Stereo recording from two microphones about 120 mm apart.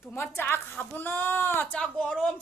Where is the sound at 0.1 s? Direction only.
20° left (ahead or behind).